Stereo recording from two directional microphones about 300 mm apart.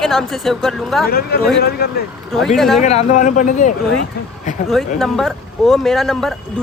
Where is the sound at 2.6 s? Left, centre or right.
Centre.